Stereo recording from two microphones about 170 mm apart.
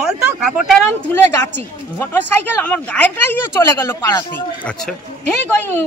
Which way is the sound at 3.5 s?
20° left (ahead or behind).